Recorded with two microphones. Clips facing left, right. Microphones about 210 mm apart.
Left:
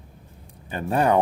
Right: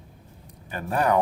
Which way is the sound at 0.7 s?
25° left (ahead or behind).